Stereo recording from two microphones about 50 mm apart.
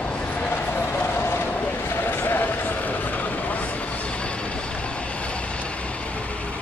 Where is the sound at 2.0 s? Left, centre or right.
Left.